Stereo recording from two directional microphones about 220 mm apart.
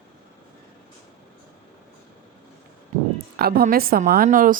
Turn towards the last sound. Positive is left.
turn(degrees=-35)  # may be behind; listen again after turning